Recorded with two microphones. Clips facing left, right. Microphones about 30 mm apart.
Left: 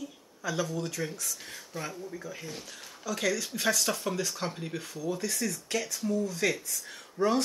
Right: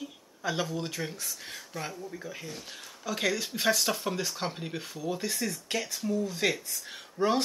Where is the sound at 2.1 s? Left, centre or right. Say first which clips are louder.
Even; centre.